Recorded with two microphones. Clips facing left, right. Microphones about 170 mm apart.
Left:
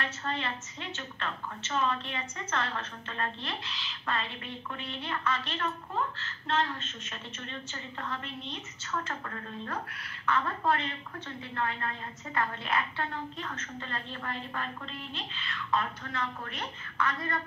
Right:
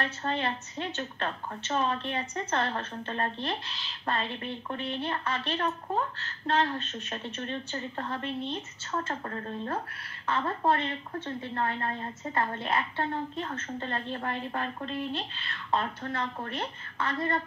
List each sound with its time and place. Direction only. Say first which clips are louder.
0.2 s a woman's voice: right 4 dB; 35° right (ahead or behind)